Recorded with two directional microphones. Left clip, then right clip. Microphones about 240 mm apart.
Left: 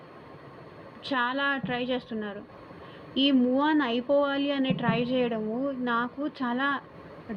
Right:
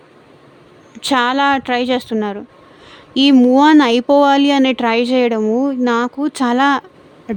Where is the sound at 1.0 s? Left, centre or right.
Right.